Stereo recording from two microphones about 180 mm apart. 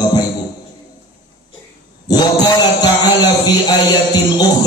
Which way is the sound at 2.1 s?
20° left (ahead or behind).